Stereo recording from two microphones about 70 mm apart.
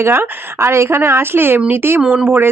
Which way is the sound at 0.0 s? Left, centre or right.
Right.